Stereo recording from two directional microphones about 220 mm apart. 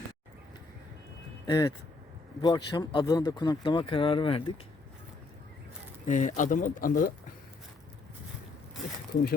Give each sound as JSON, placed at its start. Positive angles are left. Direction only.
{"t": 1.5, "sound": "speech", "side_deg": 20}
{"t": 6.1, "sound": "speech", "side_deg": 35}